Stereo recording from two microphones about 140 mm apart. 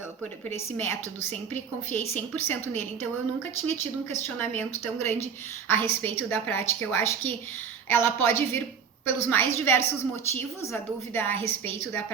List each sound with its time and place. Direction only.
0.5 s a woman's voice: 15° left (ahead or behind)